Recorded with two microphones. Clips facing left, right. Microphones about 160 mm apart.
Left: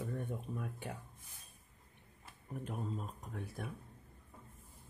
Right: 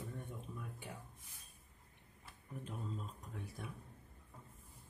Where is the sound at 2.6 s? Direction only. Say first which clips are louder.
Left 4 dB; 55° left (ahead or behind).